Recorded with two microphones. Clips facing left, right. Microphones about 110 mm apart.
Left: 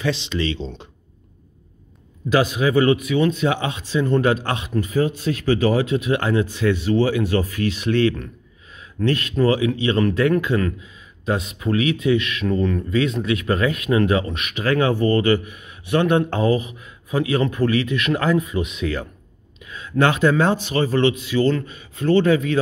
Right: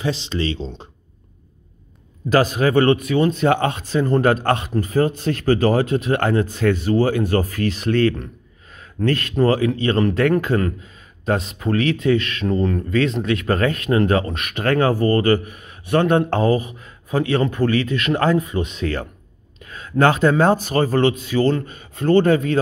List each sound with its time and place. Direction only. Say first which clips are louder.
0.0 s speech: even; 35° right (ahead or behind)
2.2 s speech: right 2 dB; 40° right (ahead or behind)
8.7 s a sound: right 1 dB; 50° right (ahead or behind)
9.4 s speech: right 1 dB; 45° right (ahead or behind)